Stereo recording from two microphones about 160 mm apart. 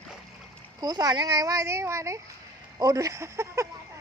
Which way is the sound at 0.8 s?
25° right (ahead or behind).